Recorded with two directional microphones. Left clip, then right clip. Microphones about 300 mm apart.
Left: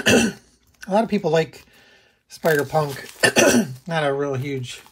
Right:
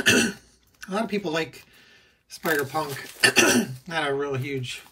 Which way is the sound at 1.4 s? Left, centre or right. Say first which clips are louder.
Left 4 dB; right.